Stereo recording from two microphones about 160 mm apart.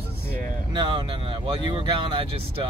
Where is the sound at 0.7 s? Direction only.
30° right (ahead or behind).